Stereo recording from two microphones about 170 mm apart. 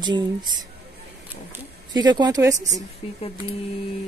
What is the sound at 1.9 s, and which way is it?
Speech, 25° right (ahead or behind).